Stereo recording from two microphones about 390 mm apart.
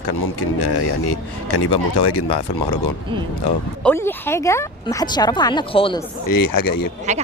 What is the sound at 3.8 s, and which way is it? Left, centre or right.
Speech, centre.